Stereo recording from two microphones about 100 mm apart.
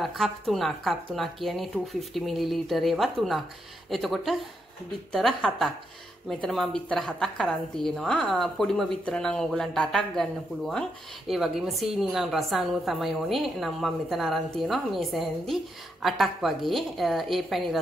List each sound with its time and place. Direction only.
0.0 s a woman's voice: centre (ahead or behind)